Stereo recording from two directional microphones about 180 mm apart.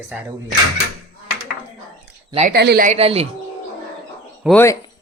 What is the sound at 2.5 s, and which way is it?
Speech, 65° right (ahead or behind).